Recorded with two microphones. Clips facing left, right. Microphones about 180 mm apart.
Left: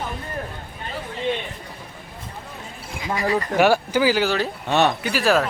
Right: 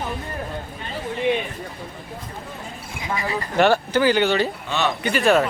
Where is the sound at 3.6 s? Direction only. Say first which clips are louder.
Right 1 dB; 10° left (ahead or behind).